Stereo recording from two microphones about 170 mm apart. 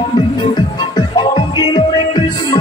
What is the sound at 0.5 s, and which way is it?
Music, 25° left (ahead or behind).